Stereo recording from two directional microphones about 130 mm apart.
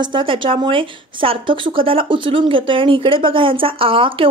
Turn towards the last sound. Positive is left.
turn(degrees=-45)  # may be behind; listen again after turning